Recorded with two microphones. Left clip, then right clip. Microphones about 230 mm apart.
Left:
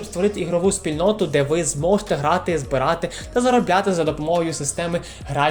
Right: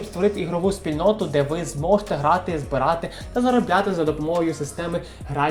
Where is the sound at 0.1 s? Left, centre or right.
Left.